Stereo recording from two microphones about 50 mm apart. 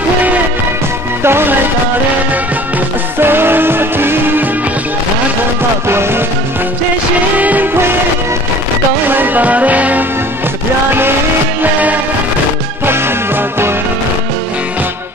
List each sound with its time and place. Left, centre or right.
1.2 s music: right
3.2 s music: right
5.9 s music: right
7.3 s music: right
7.7 s music: right
9.1 s music: right
12.8 s music: right